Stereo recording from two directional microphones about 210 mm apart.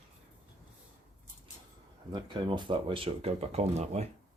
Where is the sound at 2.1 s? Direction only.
20° right (ahead or behind).